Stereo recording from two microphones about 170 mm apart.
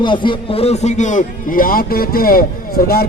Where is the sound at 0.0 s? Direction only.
30° left (ahead or behind).